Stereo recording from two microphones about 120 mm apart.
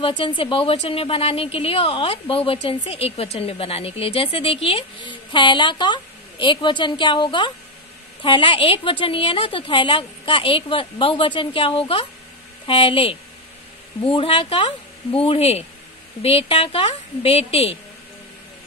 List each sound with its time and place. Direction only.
0.2 s a woman's voice: 50° left (ahead or behind)